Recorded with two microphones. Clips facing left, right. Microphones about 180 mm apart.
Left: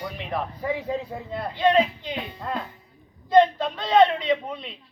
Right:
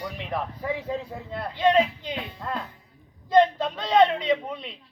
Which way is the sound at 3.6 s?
5° left (ahead or behind).